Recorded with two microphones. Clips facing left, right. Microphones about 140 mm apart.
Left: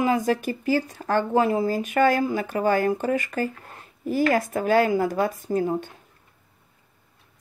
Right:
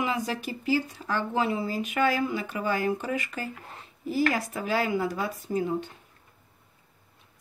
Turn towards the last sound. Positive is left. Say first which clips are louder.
# left 5 dB
turn(degrees=45)  # may be behind; listen again after turning